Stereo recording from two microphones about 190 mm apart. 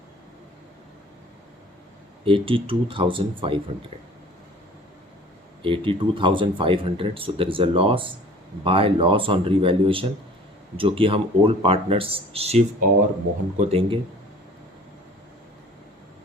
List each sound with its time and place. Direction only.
2.2 s speech: 30° right (ahead or behind)
5.6 s speech: 25° right (ahead or behind)